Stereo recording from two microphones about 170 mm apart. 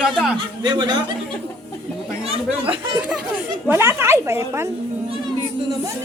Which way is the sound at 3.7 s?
15° right (ahead or behind).